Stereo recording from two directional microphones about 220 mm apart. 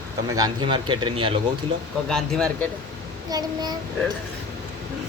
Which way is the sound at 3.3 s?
15° right (ahead or behind).